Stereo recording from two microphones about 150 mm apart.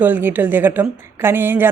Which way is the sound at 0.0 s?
15° right (ahead or behind).